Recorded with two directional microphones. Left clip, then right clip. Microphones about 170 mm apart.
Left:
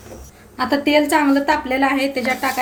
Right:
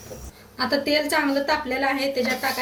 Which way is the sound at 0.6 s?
60° left (ahead or behind).